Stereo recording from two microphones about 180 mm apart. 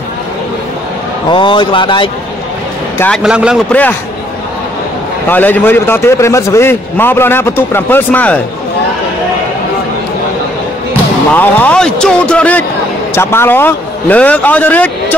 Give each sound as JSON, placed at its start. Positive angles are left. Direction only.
{"t": 1.3, "sound": "speech", "side_deg": 25}
{"t": 3.2, "sound": "a man's voice", "side_deg": -5}
{"t": 5.3, "sound": "a man's voice", "side_deg": 10}
{"t": 11.3, "sound": "a man's voice", "side_deg": 5}